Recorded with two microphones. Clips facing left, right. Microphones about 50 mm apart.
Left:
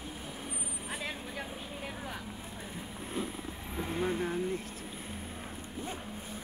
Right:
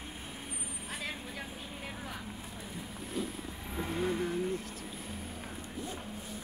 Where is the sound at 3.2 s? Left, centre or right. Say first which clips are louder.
Even; left.